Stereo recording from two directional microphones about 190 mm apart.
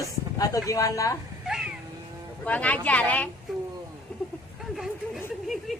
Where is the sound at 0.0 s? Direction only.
20° left (ahead or behind).